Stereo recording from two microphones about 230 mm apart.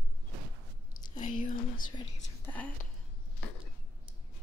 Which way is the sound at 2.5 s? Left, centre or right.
Centre.